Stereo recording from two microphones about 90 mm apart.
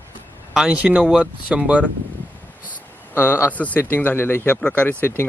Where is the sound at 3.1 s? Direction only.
25° left (ahead or behind).